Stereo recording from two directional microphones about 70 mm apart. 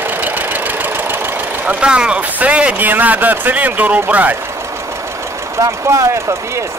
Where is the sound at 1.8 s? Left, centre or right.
Centre.